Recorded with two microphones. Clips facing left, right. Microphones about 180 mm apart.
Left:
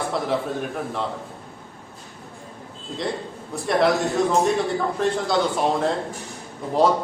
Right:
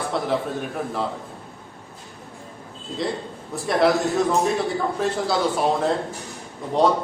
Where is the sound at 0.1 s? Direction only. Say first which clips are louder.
Even; centre (ahead or behind).